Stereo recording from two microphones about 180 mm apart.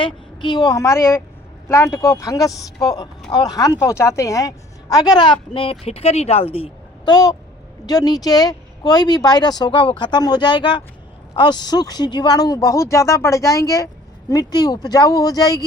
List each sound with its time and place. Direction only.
0.0 s a woman's voice: 25° left (ahead or behind)